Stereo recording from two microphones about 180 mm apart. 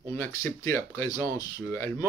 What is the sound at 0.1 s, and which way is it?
Speech, 15° left (ahead or behind).